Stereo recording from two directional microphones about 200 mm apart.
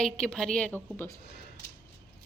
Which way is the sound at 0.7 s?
10° right (ahead or behind).